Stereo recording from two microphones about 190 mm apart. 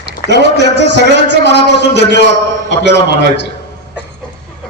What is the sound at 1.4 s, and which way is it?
Speech, 65° left (ahead or behind).